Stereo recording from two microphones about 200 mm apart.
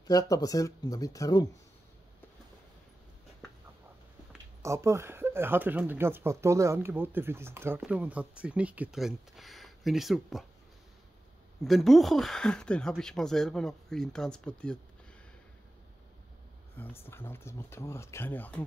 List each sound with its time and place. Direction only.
0.0 s speech: 15° left (ahead or behind)
4.6 s speech: 15° right (ahead or behind)
11.6 s speech: centre (ahead or behind)
16.7 s speech: 10° left (ahead or behind)